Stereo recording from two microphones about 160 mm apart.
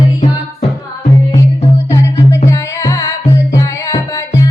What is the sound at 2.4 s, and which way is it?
Music, 20° left (ahead or behind).